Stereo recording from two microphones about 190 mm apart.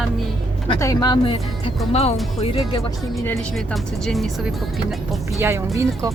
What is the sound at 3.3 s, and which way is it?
Speech, centre (ahead or behind).